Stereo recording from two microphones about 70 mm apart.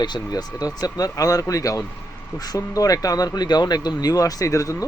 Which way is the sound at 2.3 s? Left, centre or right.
Left.